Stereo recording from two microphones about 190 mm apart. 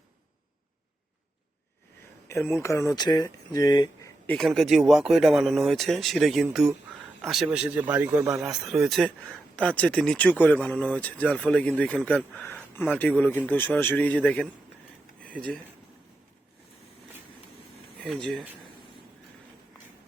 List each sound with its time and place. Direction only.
2.2 s speech: 10° left (ahead or behind)
4.3 s speech: centre (ahead or behind)
15.2 s a sound: 5° left (ahead or behind)
18.0 s speech: centre (ahead or behind)